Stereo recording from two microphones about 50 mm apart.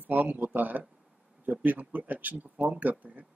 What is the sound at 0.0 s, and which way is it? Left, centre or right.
Speech, right.